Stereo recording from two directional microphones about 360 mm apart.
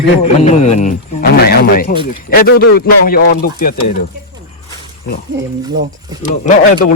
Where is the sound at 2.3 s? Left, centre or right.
Left.